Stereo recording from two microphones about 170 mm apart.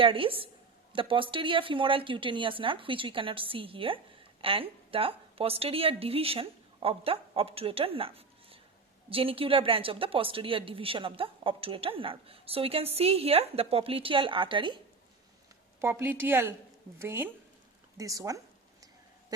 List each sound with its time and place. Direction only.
0.0 s speech: 30° right (ahead or behind)
15.8 s a woman's voice: 15° right (ahead or behind)
17.9 s a sound: 20° right (ahead or behind)